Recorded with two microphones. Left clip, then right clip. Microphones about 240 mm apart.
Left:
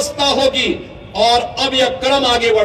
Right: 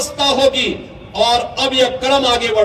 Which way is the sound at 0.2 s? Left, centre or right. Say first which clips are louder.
Right 1 dB; right.